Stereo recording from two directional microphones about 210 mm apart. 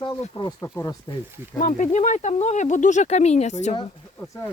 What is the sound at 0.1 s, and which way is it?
Speech, 15° left (ahead or behind).